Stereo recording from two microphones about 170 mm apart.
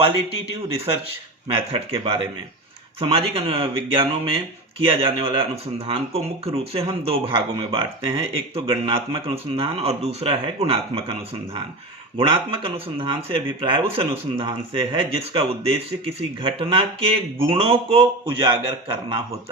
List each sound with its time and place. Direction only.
1.5 s speech: 30° right (ahead or behind)